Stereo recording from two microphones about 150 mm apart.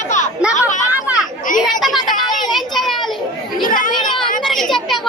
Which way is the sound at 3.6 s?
65° left (ahead or behind).